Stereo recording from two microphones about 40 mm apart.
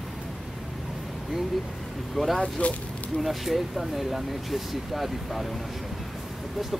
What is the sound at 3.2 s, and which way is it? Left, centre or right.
Speech, centre.